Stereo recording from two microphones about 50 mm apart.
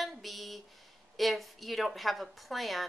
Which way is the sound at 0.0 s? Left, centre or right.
Centre.